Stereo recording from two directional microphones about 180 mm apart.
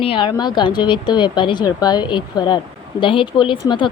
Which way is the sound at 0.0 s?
30° left (ahead or behind).